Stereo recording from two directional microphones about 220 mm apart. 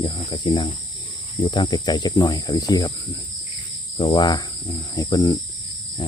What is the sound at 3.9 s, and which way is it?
Speech, 20° left (ahead or behind).